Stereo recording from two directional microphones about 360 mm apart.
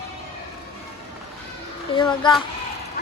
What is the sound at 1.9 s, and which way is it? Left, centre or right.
Speech, centre.